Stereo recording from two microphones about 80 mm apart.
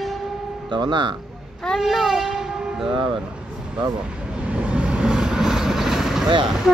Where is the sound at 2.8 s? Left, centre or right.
Right.